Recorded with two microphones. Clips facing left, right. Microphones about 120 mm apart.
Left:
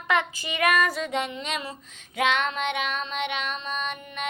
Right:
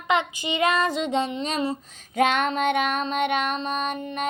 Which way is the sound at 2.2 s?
45° right (ahead or behind).